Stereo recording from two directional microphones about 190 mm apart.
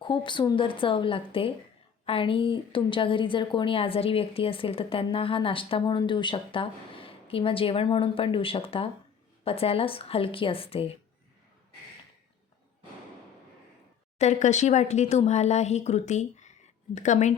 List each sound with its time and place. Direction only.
0.0 s a woman's voice: 25° left (ahead or behind)
14.2 s speech: 40° left (ahead or behind)